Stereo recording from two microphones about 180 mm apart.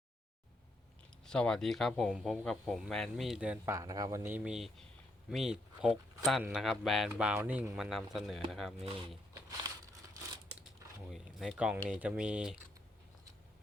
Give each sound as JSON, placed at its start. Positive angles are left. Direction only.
{"t": 1.2, "sound": "speech", "side_deg": 5}
{"t": 3.8, "sound": "speech", "side_deg": -20}
{"t": 8.8, "sound": "speech", "side_deg": -30}
{"t": 11.1, "sound": "speech", "side_deg": 0}